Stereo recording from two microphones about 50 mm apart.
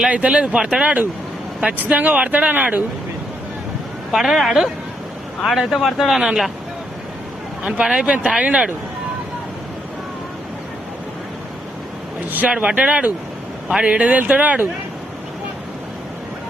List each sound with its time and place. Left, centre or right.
0.1 s speech: right
4.1 s speech: centre
7.6 s speech: centre
12.5 s speech: centre